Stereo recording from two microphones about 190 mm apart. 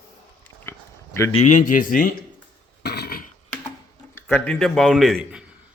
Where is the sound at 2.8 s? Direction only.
60° left (ahead or behind).